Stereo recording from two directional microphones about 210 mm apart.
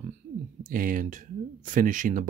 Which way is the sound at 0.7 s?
40° right (ahead or behind).